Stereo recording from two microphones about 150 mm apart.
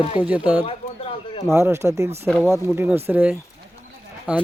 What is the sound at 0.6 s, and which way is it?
Bird, 40° left (ahead or behind).